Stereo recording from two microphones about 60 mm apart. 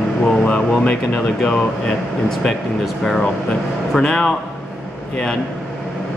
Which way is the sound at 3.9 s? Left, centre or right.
Centre.